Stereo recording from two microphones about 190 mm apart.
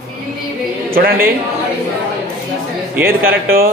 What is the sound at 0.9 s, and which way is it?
Speech, 50° right (ahead or behind).